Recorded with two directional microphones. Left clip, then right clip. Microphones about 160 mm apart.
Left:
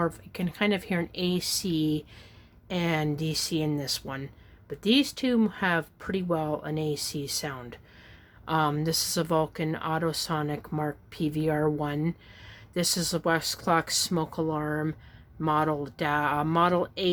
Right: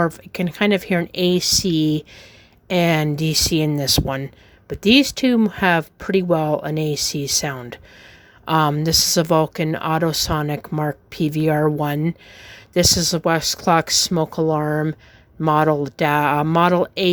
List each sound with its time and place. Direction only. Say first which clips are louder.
0.0 s speech: right 9 dB; 45° right (ahead or behind)